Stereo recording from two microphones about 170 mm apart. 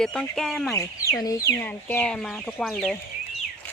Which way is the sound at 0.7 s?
15° left (ahead or behind).